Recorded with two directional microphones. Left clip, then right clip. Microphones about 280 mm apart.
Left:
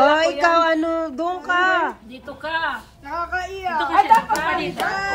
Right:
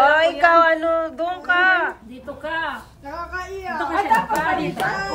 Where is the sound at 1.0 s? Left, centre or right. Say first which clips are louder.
Right 1 dB; centre.